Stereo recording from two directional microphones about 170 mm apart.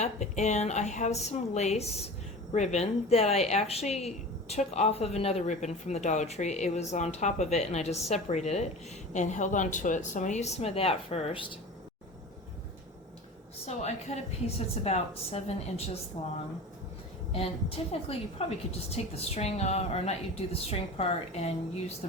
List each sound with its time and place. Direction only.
0.0 s a woman's voice: 45° left (ahead or behind)
13.7 s speech: 40° left (ahead or behind)
17.3 s speech: 35° left (ahead or behind)